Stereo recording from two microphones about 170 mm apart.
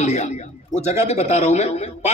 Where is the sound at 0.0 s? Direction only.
40° left (ahead or behind).